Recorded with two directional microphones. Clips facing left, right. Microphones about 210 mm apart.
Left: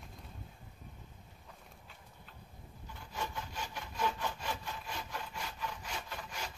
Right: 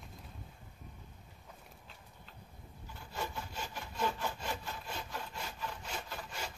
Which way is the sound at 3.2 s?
5° right (ahead or behind).